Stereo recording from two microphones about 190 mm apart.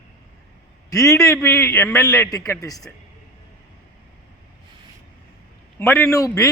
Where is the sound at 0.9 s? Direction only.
15° left (ahead or behind).